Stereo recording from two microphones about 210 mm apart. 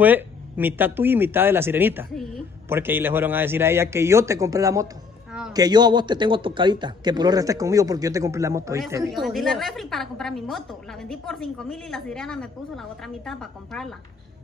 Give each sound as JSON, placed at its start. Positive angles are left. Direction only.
{"t": 0.0, "sound": "a man's voice", "side_deg": -10}
{"t": 9.1, "sound": "a woman's voice", "side_deg": 0}